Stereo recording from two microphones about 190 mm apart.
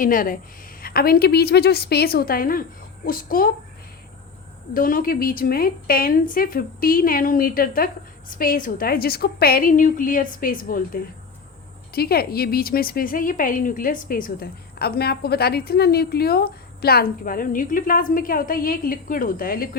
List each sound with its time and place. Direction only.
0.0 s a woman's voice: 45° left (ahead or behind)
4.7 s a woman's voice: 50° left (ahead or behind)